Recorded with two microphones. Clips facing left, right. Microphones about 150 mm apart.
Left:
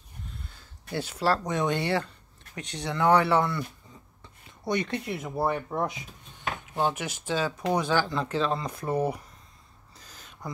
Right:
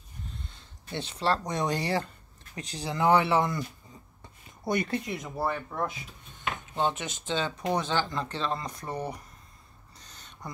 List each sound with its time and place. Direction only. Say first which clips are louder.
1.1 s speech: left 2 dB; 5° left (ahead or behind)
1.5 s speech: left 2 dB; 35° right (ahead or behind)
3.0 s speech: left 1 dB; 5° right (ahead or behind)
4.6 s speech: even; 5° right (ahead or behind)
9.9 s a sound: left 2 dB; 5° left (ahead or behind)